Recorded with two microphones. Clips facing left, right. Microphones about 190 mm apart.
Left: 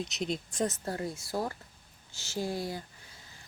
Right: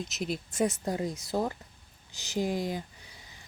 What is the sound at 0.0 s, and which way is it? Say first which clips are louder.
Speech: even; centre (ahead or behind).